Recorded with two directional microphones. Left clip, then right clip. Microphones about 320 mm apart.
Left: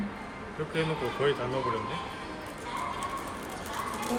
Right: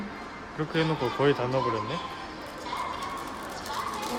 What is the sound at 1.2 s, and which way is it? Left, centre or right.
Speech, right.